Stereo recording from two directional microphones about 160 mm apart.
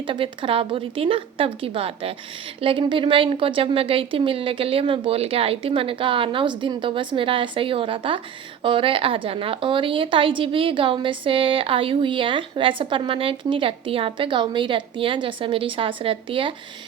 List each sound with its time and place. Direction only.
0.1 s a woman's voice: 35° right (ahead or behind)